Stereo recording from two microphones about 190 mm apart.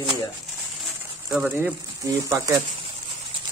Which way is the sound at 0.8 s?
Centre (ahead or behind).